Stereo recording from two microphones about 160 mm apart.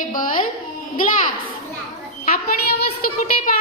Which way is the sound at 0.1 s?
55° left (ahead or behind).